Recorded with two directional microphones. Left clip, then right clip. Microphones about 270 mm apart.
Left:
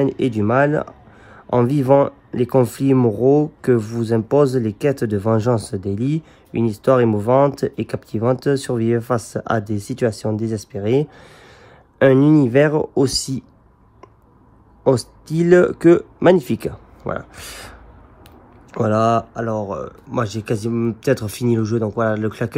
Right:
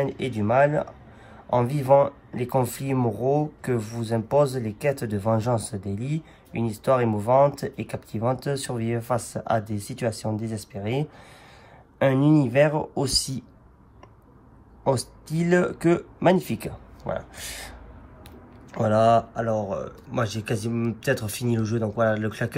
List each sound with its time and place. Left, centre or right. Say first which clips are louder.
0.2 s speech: left 1 dB; left
14.9 s speech: left 7 dB; left